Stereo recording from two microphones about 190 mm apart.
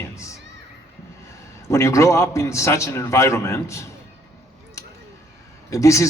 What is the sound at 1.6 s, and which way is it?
A man's voice, 15° left (ahead or behind).